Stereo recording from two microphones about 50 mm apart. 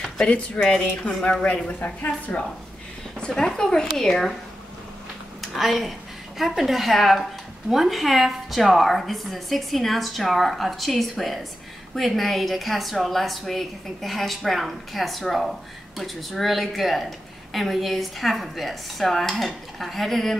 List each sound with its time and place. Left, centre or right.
0.6 s a woman's voice: left
3.2 s speech: centre
5.4 s a woman's voice: centre